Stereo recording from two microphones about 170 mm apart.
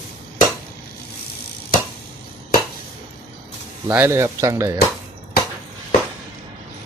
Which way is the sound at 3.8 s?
10° right (ahead or behind).